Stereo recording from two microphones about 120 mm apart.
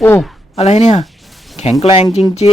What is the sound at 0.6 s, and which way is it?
Speech, 65° left (ahead or behind).